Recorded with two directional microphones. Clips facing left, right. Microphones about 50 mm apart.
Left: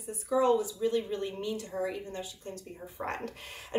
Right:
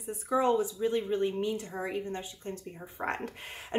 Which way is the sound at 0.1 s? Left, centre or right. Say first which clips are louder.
Left 1 dB; right.